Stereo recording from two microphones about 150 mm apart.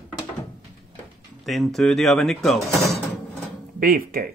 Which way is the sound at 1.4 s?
Centre (ahead or behind).